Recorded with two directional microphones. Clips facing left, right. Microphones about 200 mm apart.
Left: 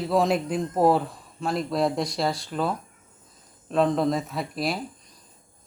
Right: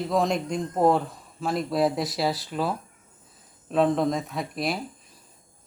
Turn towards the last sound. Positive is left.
turn(degrees=0)  # may be behind; listen again after turning